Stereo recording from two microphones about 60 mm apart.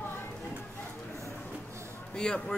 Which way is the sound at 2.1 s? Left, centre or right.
Centre.